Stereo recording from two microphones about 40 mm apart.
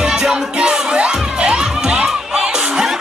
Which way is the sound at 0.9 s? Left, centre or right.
Right.